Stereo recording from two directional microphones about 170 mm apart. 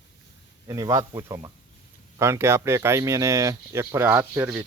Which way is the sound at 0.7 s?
20° right (ahead or behind).